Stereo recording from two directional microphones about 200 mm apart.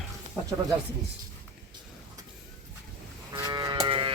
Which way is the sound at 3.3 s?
20° right (ahead or behind).